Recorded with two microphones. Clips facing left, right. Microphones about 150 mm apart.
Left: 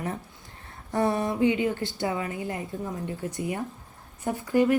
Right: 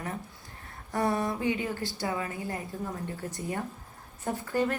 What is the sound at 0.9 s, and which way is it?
A woman's voice, 25° left (ahead or behind).